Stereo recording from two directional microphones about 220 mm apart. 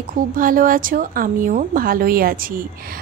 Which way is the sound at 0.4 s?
40° right (ahead or behind).